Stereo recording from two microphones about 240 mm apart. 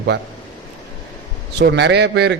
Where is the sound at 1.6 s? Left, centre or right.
Right.